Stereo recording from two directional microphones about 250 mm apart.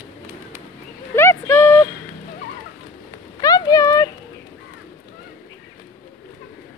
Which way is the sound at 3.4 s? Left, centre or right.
Centre.